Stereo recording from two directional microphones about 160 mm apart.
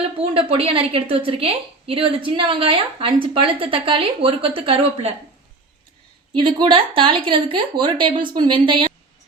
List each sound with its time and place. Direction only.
0.2 s a woman's voice: 35° right (ahead or behind)
6.3 s a woman's voice: 30° right (ahead or behind)